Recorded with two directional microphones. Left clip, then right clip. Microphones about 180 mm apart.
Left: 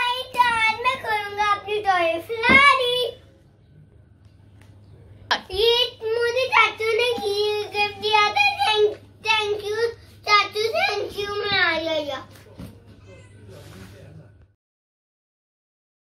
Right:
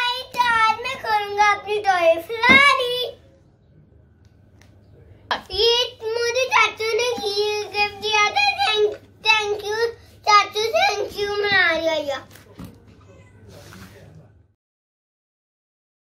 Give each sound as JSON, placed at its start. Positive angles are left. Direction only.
{"t": 0.1, "sound": "child singing", "side_deg": 0}
{"t": 5.3, "sound": "child singing", "side_deg": 0}